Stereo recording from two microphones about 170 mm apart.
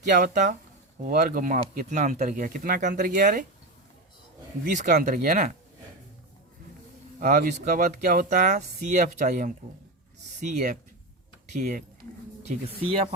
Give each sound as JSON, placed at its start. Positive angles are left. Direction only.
{"t": 0.0, "sound": "speech", "side_deg": -50}
{"t": 4.6, "sound": "speech", "side_deg": -50}
{"t": 7.2, "sound": "speech", "side_deg": -50}
{"t": 11.5, "sound": "speech", "side_deg": -50}
{"t": 12.5, "sound": "speech", "side_deg": -35}